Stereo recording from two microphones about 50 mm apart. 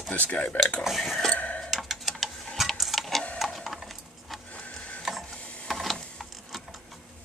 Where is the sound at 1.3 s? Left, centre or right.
Left.